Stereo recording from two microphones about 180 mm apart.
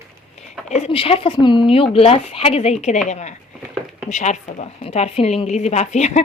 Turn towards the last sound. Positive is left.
turn(degrees=40)  # may be behind; listen again after turning